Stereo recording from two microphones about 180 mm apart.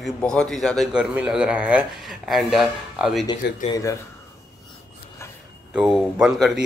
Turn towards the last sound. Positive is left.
turn(degrees=-5)  # may be behind; listen again after turning